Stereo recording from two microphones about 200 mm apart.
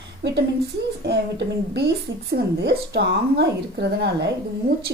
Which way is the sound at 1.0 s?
55° right (ahead or behind).